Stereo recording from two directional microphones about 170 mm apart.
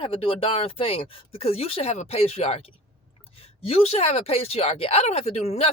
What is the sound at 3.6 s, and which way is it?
Speech, 35° left (ahead or behind).